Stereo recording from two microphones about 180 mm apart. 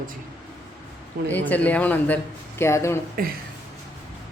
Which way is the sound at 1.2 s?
10° left (ahead or behind).